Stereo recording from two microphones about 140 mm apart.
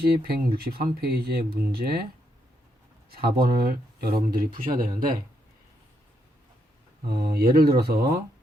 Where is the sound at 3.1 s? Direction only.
90° right.